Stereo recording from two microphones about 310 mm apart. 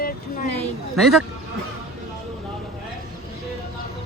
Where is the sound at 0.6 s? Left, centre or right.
Centre.